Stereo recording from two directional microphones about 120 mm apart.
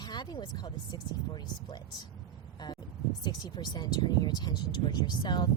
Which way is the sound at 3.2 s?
35° left (ahead or behind).